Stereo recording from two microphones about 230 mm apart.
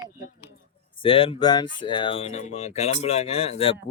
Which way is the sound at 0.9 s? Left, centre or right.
Left.